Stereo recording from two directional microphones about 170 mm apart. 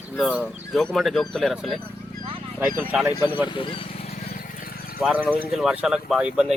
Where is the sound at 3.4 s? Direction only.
30° left (ahead or behind).